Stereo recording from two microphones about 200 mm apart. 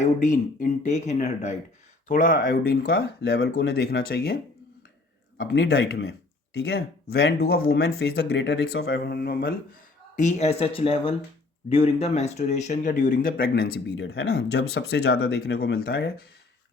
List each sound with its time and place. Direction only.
0.0 s speech: 40° left (ahead or behind)
5.4 s speech: 55° left (ahead or behind)
10.2 s speech: 35° left (ahead or behind); by 16.2 s 50° left (ahead or behind)